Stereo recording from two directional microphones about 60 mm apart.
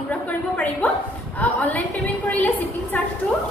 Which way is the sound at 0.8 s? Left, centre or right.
Left.